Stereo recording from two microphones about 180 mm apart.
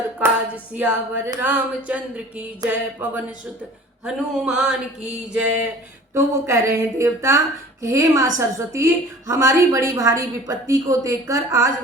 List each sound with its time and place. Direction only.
0.8 s a woman's voice: 10° right (ahead or behind)